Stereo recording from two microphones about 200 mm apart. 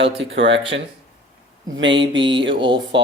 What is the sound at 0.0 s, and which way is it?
Speech, 65° right (ahead or behind).